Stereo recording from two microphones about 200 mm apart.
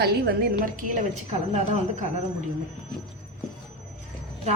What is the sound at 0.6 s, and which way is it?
A woman's voice, 40° right (ahead or behind).